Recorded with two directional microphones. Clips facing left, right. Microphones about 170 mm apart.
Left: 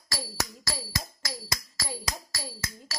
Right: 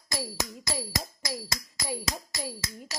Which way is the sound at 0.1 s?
20° right (ahead or behind).